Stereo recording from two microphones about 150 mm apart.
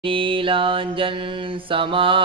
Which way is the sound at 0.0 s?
35° right (ahead or behind).